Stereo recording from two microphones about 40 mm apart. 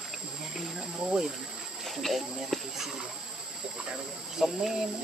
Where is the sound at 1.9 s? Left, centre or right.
Centre.